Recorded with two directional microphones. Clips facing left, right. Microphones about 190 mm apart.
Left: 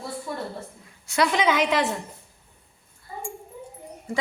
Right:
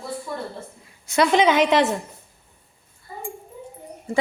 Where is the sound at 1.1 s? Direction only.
25° right (ahead or behind).